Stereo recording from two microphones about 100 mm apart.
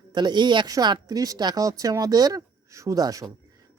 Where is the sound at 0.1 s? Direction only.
45° right (ahead or behind).